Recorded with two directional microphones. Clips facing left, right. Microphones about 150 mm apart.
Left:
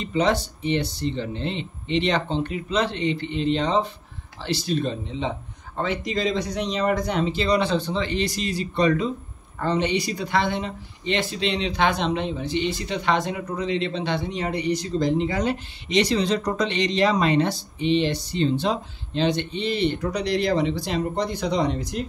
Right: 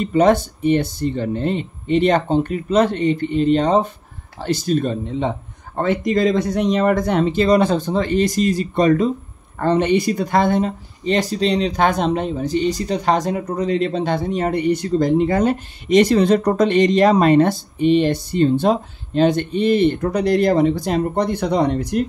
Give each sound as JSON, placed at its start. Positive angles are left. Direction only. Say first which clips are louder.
{"t": 0.0, "sound": "speech", "louder": "right 7 dB", "side_deg": -50}